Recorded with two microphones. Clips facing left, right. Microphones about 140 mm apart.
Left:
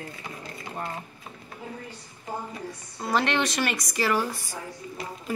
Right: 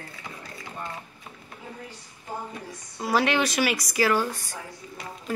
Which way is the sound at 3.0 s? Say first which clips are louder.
Right 2 dB; 5° right (ahead or behind).